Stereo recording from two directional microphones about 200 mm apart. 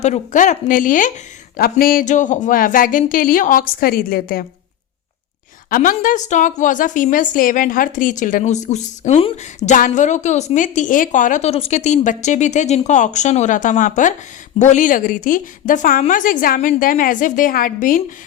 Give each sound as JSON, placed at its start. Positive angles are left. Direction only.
{"t": 0.0, "sound": "a woman's voice", "side_deg": 35}
{"t": 5.7, "sound": "a woman's voice", "side_deg": 40}